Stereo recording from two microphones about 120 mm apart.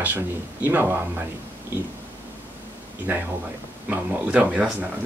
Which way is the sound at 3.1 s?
15° right (ahead or behind).